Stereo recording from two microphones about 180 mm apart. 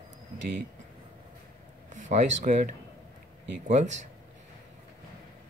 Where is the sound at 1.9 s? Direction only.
40° right (ahead or behind).